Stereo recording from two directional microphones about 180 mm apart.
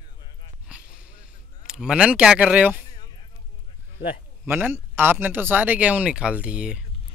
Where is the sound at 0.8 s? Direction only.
50° left (ahead or behind).